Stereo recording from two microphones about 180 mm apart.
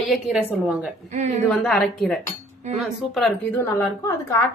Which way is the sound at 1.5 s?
Centre (ahead or behind).